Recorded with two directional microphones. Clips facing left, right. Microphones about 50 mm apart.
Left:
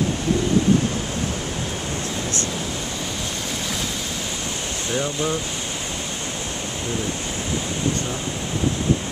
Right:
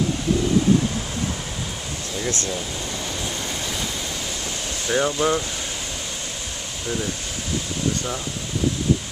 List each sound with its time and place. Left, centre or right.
4.9 s speech: right